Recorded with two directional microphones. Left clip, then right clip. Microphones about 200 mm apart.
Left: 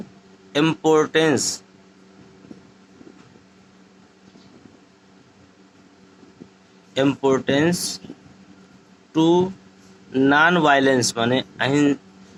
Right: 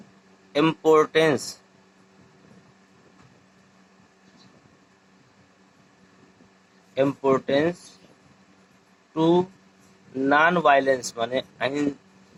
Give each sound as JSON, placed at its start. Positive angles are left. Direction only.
{"t": 0.5, "sound": "a man's voice", "side_deg": 20}
{"t": 6.9, "sound": "a man's voice", "side_deg": 25}
{"t": 9.1, "sound": "a man's voice", "side_deg": 25}